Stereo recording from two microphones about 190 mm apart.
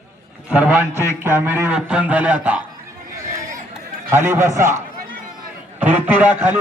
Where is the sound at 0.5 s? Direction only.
10° right (ahead or behind).